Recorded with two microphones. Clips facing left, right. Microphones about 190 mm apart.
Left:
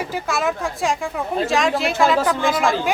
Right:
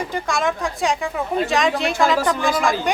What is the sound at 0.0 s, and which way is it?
A woman's voice, 5° left (ahead or behind).